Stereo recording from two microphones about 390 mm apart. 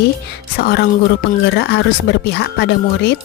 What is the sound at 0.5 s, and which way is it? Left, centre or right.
Speech, left.